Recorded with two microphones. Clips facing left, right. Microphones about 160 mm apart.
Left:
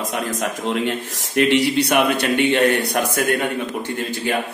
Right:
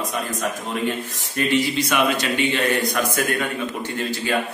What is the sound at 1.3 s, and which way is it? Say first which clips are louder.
A man's voice: left 4 dB; 75° left (ahead or behind).